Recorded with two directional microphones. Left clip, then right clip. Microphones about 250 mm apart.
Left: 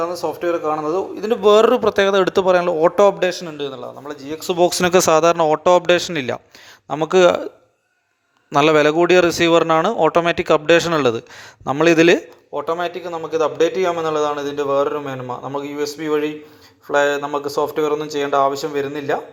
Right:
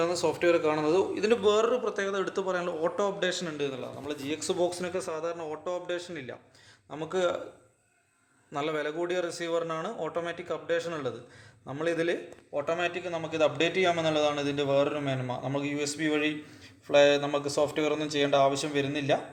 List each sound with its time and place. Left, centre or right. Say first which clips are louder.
0.2 s a man's voice: left 4 dB; centre
1.4 s speech: left 18 dB; left
8.5 s speech: left 18 dB; left
12.5 s a man's voice: left 8 dB; centre
18.7 s a man's voice: left 7 dB; left